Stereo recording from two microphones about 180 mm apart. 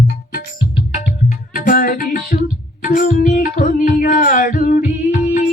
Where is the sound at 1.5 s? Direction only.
50° left (ahead or behind).